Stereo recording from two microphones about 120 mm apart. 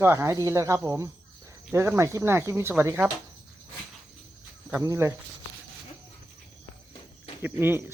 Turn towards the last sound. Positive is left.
turn(degrees=-20)  # may be behind; listen again after turning